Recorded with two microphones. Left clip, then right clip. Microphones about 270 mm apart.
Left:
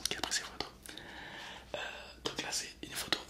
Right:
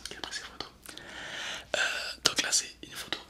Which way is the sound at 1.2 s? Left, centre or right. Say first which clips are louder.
Right 9 dB; right.